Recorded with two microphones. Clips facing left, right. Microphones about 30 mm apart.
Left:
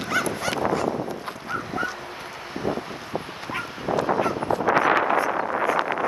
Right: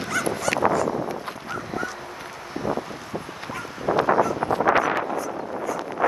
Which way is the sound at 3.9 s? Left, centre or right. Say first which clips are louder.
Right 3 dB; right.